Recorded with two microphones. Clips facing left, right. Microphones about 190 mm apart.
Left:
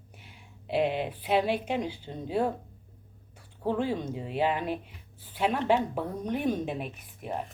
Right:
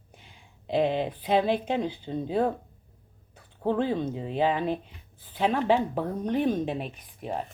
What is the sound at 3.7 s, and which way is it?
Speech, 10° left (ahead or behind).